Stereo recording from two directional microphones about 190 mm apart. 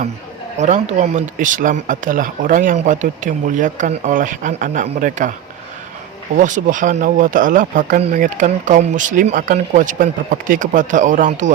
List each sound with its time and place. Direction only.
0.6 s speech: 40° right (ahead or behind)
6.3 s speech: 40° right (ahead or behind)